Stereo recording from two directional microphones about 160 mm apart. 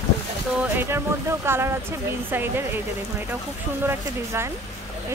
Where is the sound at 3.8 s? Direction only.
15° right (ahead or behind).